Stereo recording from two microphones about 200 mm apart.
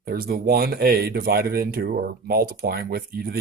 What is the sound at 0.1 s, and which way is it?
Speech, 50° right (ahead or behind).